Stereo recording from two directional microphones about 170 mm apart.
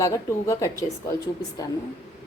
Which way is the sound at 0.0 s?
15° left (ahead or behind).